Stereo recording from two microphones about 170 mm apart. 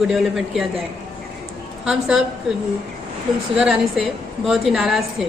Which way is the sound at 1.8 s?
5° right (ahead or behind).